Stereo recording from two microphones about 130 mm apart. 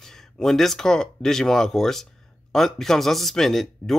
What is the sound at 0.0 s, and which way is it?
Speech, 5° left (ahead or behind).